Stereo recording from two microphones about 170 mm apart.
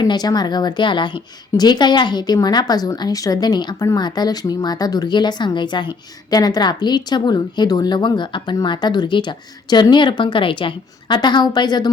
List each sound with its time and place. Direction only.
0.0 s a woman's voice: 25° left (ahead or behind)